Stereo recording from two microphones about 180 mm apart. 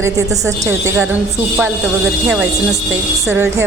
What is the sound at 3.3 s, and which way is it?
Speech, 15° right (ahead or behind).